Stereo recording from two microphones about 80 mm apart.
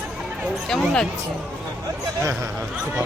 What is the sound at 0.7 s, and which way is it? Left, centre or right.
Speech, centre.